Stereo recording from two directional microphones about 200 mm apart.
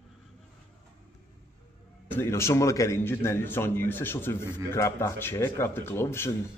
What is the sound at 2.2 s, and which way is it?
A man's voice, 15° left (ahead or behind).